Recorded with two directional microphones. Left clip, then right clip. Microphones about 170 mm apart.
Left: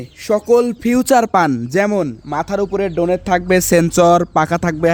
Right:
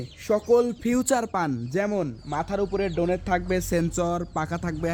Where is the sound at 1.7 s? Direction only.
70° left (ahead or behind).